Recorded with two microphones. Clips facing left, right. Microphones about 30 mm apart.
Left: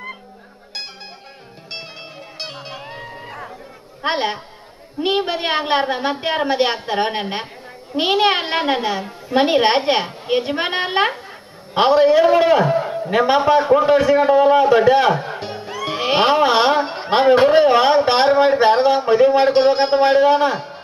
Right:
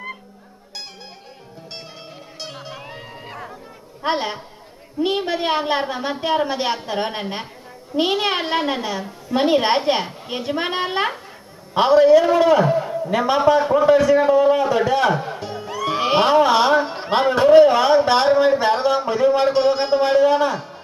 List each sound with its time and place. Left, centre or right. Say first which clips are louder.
4.0 s a woman's voice: left 2 dB; left
15.7 s music: right 1 dB; centre
16.2 s a man's voice: left 1 dB; left